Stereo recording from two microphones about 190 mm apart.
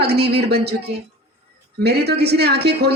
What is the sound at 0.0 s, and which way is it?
A woman's voice, 55° right (ahead or behind).